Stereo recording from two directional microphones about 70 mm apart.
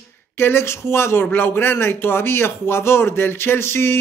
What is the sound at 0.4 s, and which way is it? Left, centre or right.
Speech, left.